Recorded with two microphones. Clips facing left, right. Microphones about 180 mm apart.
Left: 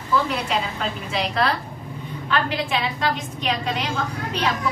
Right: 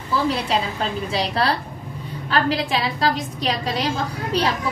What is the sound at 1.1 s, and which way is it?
A woman's voice, 35° right (ahead or behind).